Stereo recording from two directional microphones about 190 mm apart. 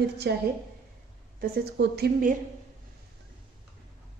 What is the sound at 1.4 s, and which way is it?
Speech, 55° right (ahead or behind).